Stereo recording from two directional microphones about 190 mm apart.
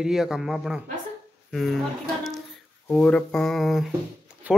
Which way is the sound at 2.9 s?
5° left (ahead or behind).